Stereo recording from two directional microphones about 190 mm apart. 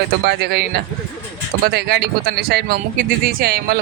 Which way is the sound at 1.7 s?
55° right (ahead or behind).